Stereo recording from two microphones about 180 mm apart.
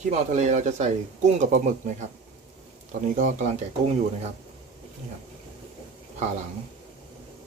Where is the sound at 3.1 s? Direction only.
45° right (ahead or behind).